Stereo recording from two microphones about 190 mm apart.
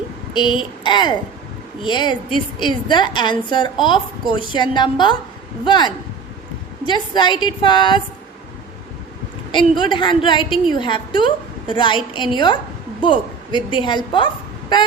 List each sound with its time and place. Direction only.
0.3 s a woman's voice: 25° left (ahead or behind)
9.5 s a woman's voice: 25° left (ahead or behind)